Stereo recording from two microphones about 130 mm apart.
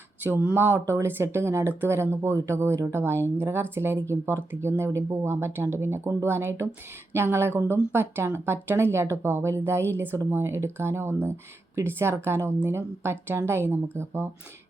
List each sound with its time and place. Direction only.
0.2 s speech: 15° right (ahead or behind)